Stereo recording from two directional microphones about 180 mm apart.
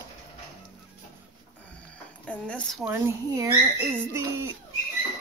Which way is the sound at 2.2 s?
5° left (ahead or behind).